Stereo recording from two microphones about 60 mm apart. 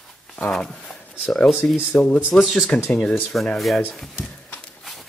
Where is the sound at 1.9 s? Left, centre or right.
Left.